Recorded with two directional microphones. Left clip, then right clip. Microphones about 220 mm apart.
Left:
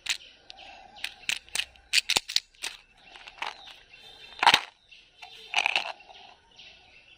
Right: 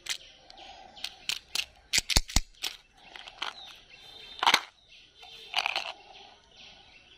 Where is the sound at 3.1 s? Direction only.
Centre (ahead or behind).